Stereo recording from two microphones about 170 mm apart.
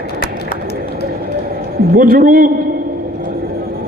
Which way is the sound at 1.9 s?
60° right (ahead or behind).